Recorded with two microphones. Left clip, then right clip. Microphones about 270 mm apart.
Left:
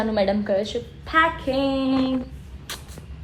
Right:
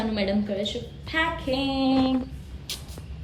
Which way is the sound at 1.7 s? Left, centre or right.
Centre.